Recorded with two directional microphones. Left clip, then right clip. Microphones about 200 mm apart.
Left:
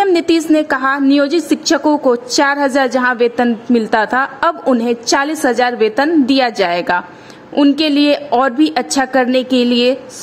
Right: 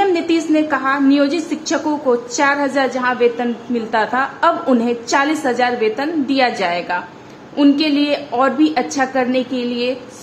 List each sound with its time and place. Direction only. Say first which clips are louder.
0.0 s a woman's voice: left 3 dB; 50° left (ahead or behind)